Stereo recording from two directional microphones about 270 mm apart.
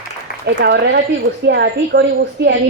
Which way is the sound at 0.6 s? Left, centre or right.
Right.